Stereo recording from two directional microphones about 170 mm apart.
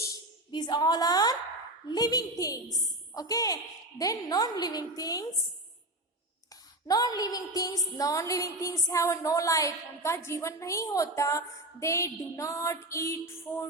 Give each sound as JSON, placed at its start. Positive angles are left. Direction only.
{"t": 0.5, "sound": "a woman's voice", "side_deg": 25}
{"t": 6.8, "sound": "a woman's voice", "side_deg": 20}